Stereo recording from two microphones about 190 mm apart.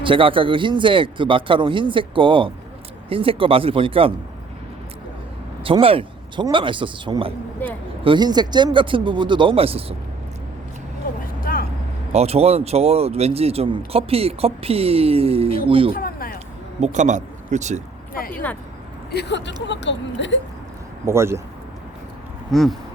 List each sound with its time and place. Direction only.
0.0 s a man's voice: 25° right (ahead or behind)
5.6 s a man's voice: 30° right (ahead or behind)
11.3 s vehicle: 50° left (ahead or behind)
12.1 s speech: 35° right (ahead or behind)
16.0 s a sound: 50° left (ahead or behind)
16.8 s speech: 40° right (ahead or behind)
18.1 s speech: 50° left (ahead or behind)
19.1 s speech: 65° left (ahead or behind)
21.1 s speech: 15° right (ahead or behind)
22.5 s a sound: centre (ahead or behind)